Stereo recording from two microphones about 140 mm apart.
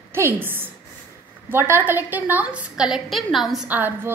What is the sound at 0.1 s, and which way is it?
A woman's voice, 15° right (ahead or behind).